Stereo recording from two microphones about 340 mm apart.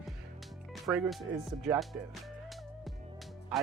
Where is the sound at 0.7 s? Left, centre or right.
Centre.